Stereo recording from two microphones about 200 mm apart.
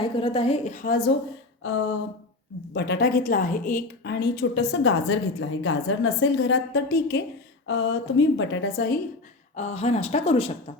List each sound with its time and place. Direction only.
0.0 s a woman's voice: 25° left (ahead or behind); by 1.1 s 50° left (ahead or behind)
2.7 s a woman's voice: 60° left (ahead or behind)
7.7 s a woman's voice: 70° left (ahead or behind)
9.6 s a woman's voice: 35° left (ahead or behind)